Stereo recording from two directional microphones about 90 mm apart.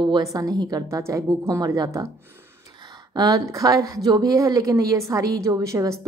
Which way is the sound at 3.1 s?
45° right (ahead or behind).